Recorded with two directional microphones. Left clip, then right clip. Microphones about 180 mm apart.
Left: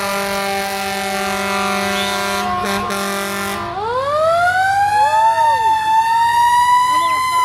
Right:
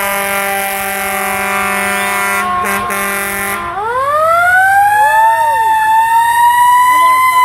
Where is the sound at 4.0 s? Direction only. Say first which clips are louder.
Right 4 dB; centre (ahead or behind).